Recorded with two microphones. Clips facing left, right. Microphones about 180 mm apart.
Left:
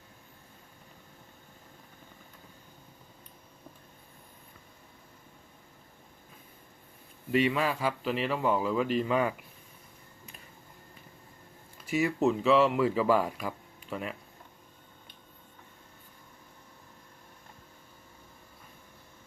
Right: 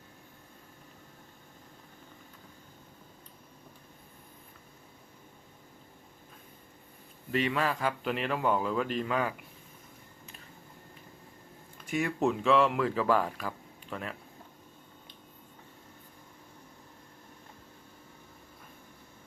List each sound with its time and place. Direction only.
7.3 s speech: 10° left (ahead or behind)
11.9 s speech: 5° left (ahead or behind)